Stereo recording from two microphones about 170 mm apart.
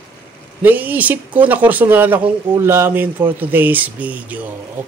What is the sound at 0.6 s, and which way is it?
Speech, 10° right (ahead or behind).